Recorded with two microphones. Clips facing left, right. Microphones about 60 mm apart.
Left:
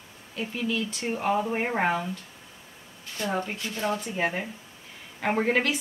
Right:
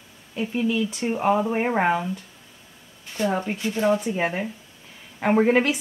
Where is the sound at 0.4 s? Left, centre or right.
Centre.